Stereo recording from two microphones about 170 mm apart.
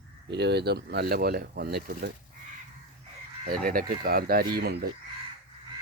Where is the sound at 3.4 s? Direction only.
55° right (ahead or behind).